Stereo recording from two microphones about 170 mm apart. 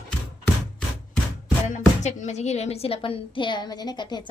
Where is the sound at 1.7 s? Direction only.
45° left (ahead or behind).